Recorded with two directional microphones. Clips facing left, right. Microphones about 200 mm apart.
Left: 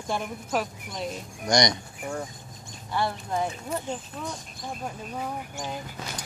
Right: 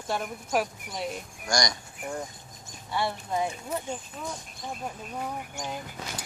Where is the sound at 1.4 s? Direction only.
20° left (ahead or behind).